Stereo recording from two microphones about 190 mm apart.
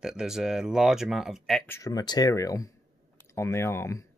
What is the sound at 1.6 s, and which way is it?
Speech, 15° left (ahead or behind).